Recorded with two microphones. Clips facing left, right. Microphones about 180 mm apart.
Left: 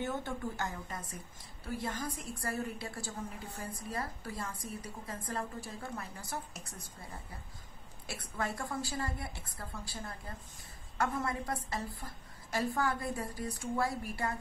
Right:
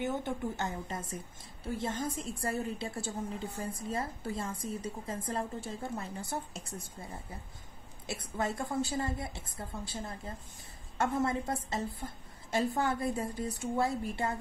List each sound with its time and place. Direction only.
0.0 s a woman's voice: 15° right (ahead or behind)
8.1 s a woman's voice: 20° right (ahead or behind)